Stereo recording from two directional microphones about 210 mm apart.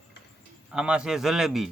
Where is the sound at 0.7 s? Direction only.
5° right (ahead or behind).